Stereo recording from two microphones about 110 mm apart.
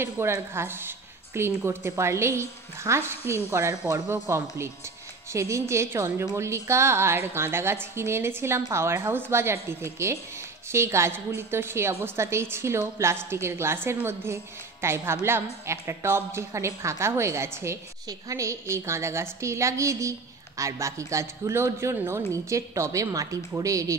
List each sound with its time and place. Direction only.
0.0 s a woman's voice: 20° right (ahead or behind)